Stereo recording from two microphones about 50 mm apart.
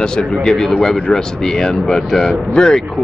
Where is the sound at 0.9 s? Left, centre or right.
Centre.